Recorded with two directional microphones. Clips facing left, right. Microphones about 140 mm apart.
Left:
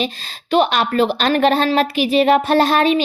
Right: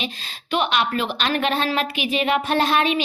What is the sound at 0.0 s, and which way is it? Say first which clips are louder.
A woman's voice: left 7 dB; 35° left (ahead or behind).